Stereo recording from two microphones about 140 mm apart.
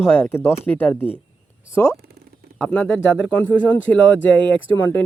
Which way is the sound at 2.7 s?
10° left (ahead or behind).